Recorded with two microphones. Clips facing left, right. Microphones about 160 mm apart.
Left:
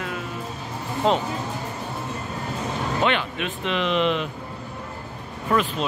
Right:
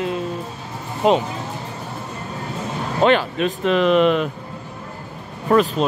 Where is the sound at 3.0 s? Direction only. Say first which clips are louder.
Right 9 dB; 40° right (ahead or behind).